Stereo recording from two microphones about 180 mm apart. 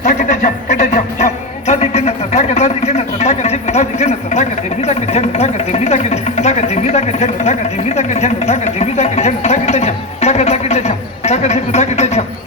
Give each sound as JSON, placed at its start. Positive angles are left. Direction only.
{"t": 0.0, "sound": "music", "side_deg": 45}